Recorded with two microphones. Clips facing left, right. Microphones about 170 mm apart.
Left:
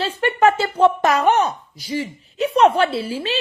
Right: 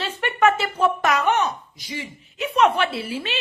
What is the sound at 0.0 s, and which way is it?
Speech, 30° left (ahead or behind).